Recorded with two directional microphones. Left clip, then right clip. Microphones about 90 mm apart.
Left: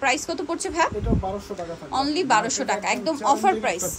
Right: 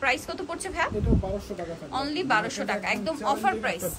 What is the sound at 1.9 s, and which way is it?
A woman's voice, 35° left (ahead or behind).